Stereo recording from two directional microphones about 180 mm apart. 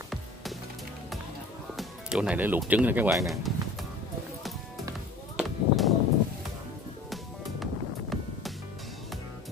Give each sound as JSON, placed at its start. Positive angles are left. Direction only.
{"t": 1.8, "sound": "music", "side_deg": -5}
{"t": 2.6, "sound": "speech", "side_deg": -10}
{"t": 5.4, "sound": "a sound", "side_deg": 0}
{"t": 7.1, "sound": "music", "side_deg": 0}